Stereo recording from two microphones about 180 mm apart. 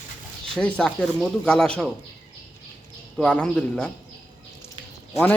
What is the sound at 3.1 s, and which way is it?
Speech, 5° left (ahead or behind).